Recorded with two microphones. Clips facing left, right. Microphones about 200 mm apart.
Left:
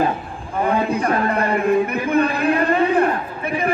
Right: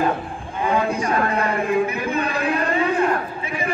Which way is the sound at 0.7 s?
60° left (ahead or behind).